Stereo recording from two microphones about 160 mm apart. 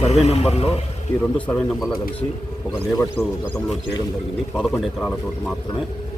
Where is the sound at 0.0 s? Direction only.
40° left (ahead or behind).